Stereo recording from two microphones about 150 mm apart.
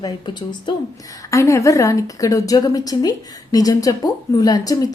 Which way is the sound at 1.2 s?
20° left (ahead or behind).